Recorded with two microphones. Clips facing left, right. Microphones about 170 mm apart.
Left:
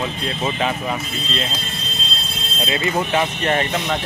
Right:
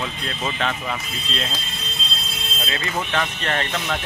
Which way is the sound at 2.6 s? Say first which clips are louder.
Left 6 dB; 20° left (ahead or behind).